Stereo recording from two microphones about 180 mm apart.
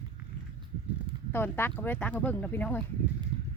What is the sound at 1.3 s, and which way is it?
Speech, 10° left (ahead or behind).